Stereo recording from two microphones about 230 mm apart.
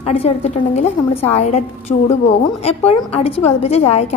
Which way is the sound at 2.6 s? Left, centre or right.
Left.